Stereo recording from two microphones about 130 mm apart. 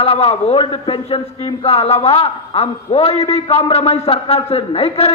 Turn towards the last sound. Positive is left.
turn(degrees=50)  # may be behind; listen again after turning